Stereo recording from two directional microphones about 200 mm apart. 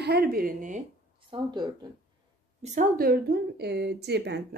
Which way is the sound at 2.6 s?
40° right (ahead or behind).